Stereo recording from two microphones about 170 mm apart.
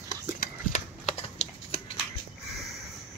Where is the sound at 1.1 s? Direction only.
35° left (ahead or behind).